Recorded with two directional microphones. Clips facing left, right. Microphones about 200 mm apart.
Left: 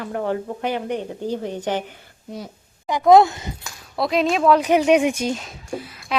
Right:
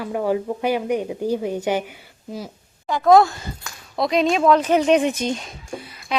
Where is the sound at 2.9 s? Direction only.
20° left (ahead or behind).